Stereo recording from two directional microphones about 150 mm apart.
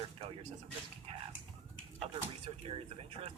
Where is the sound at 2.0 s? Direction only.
45° right (ahead or behind).